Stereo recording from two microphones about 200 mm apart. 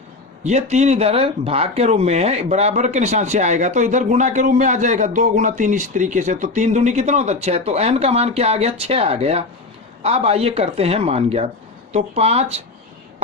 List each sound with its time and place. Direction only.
0.4 s speech: 35° right (ahead or behind)